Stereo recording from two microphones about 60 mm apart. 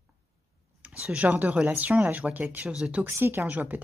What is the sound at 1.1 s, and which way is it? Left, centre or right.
Speech, right.